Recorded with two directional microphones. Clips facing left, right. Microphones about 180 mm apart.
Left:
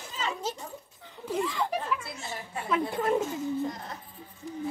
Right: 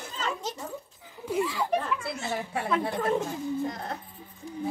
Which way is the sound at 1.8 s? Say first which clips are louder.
Right 2 dB; 65° right (ahead or behind).